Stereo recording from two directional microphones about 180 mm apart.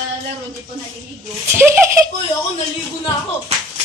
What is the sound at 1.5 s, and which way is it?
Speech, 15° right (ahead or behind).